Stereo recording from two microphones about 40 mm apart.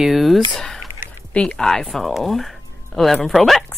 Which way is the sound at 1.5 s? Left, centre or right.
Centre.